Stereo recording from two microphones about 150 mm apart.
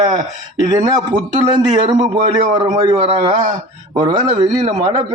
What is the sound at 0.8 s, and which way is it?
A man's voice, 25° right (ahead or behind).